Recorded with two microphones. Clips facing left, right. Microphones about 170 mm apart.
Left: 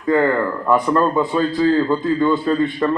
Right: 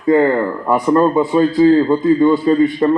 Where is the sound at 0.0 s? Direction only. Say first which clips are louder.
Right 4 dB; 20° right (ahead or behind).